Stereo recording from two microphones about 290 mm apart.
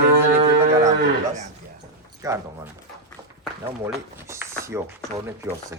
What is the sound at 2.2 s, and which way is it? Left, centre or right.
Speech, centre.